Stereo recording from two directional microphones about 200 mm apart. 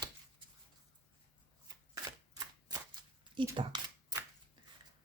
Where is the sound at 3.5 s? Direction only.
25° right (ahead or behind).